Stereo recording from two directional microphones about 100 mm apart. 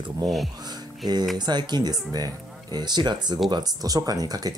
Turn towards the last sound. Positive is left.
turn(degrees=-40)  # may be behind; listen again after turning